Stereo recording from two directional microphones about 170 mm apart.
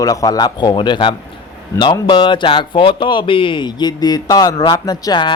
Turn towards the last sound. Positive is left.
turn(degrees=25)  # may be behind; listen again after turning